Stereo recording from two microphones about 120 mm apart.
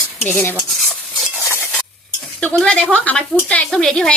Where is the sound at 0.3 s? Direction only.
15° left (ahead or behind).